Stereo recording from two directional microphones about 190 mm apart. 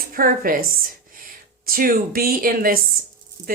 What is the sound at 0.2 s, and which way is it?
Speech, 50° right (ahead or behind).